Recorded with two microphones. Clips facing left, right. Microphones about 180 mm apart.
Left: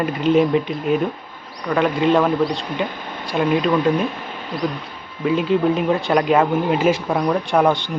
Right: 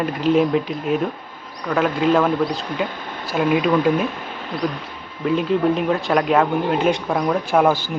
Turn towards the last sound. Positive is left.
turn(degrees=-5)  # may be behind; listen again after turning